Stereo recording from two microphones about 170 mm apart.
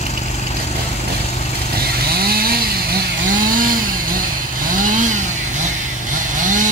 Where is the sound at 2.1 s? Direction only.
65° right (ahead or behind).